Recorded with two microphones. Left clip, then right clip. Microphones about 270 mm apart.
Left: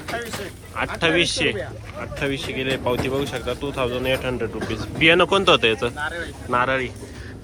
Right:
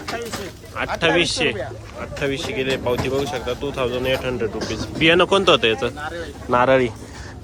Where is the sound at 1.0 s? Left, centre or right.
Centre.